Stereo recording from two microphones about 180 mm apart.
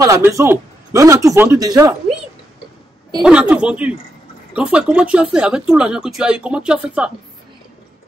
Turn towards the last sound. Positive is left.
turn(degrees=-5)  # may be behind; listen again after turning